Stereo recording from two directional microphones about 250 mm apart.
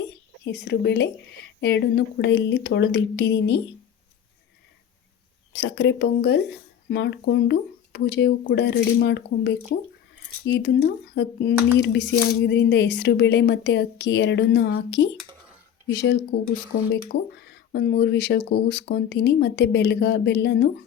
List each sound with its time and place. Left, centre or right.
0.4 s speech: left
5.5 s speech: left
16.3 s speech: left